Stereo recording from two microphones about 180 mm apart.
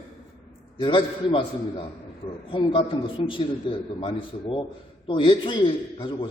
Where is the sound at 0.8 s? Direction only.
30° left (ahead or behind).